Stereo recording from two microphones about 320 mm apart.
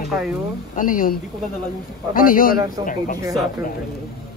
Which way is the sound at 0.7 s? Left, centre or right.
Left.